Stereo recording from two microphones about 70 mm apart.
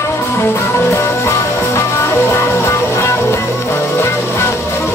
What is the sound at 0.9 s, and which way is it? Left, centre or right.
Music, left.